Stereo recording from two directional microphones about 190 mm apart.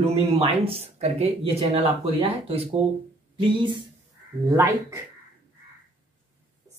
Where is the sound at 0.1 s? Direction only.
30° right (ahead or behind).